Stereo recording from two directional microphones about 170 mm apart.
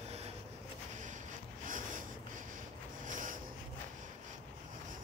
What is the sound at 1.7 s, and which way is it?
Snort, 50° right (ahead or behind).